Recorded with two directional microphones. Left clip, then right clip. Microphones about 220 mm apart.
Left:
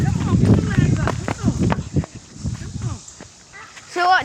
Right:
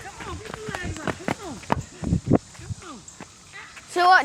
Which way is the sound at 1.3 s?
20° right (ahead or behind).